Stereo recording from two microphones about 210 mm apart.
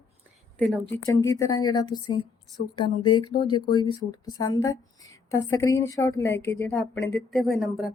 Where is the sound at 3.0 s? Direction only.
20° left (ahead or behind).